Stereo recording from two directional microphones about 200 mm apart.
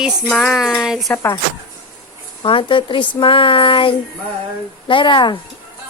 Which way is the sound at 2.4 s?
25° left (ahead or behind).